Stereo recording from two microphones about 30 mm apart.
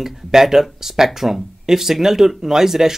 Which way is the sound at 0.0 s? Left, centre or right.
Centre.